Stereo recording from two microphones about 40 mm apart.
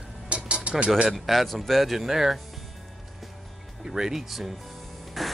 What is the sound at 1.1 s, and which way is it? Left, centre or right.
Speech, centre.